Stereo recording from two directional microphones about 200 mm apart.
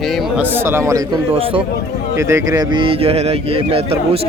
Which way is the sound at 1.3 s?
30° right (ahead or behind).